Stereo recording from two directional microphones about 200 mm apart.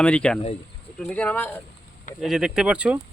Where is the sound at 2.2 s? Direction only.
5° right (ahead or behind).